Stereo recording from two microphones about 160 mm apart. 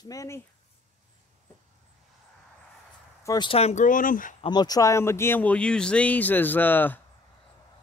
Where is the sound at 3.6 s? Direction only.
50° left (ahead or behind).